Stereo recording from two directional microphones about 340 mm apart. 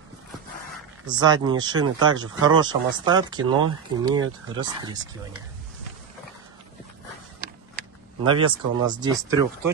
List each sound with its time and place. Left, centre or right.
1.0 s speech: centre
7.3 s a sound: right
8.3 s speech: centre